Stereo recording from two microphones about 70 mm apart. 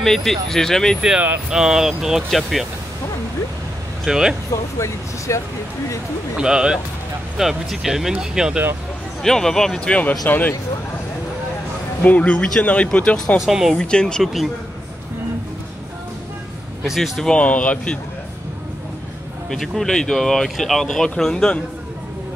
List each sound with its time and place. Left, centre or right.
0.0 s speech: centre
1.5 s speech: centre
4.0 s speech: centre
4.7 s speech: left
6.3 s speech: centre
9.2 s speech: centre; by 10.5 s left
12.0 s speech: left
13.4 s speech: centre
13.7 s speech: centre
14.2 s speech: centre
16.8 s speech: centre
17.2 s speech: centre
19.5 s speech: centre